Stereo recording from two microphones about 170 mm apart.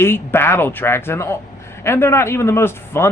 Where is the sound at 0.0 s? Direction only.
15° left (ahead or behind).